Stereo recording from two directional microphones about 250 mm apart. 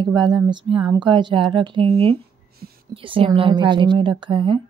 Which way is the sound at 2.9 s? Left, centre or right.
Right.